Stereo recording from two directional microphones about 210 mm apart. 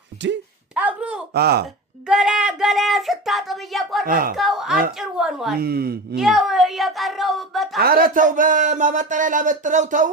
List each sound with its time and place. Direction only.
0.7 s a sound: 5° right (ahead or behind)
1.3 s speech: 50° right (ahead or behind)
2.0 s a sound: 5° right (ahead or behind)
4.0 s speech: 40° right (ahead or behind)
4.4 s speech: centre (ahead or behind)
5.5 s speech: 45° right (ahead or behind)
6.1 s speech: centre (ahead or behind)
7.8 s a man's voice: 45° right (ahead or behind)